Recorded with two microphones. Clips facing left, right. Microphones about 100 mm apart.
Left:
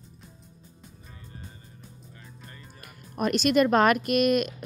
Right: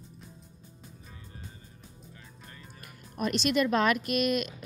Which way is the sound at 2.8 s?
55° left (ahead or behind).